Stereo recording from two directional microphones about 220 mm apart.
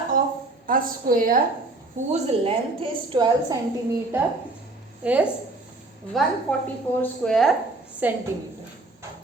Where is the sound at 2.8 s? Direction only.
25° right (ahead or behind).